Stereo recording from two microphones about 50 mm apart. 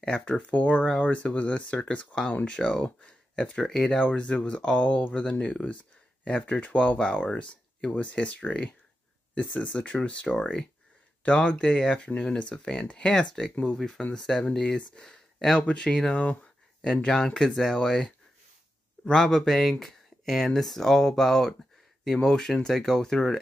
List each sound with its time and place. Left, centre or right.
0.0 s speech: left
3.5 s speech: centre
3.8 s speech: left
7.0 s speech: centre
17.0 s speech: centre